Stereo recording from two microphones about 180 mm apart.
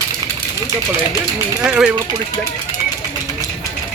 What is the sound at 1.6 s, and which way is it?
Speech, 5° right (ahead or behind).